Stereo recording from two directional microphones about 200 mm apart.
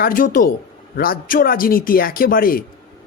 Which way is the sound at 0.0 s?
45° left (ahead or behind).